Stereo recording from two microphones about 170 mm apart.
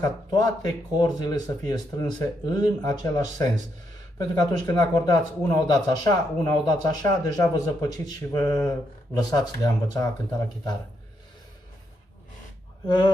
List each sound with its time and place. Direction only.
0.0 s speech: 25° left (ahead or behind)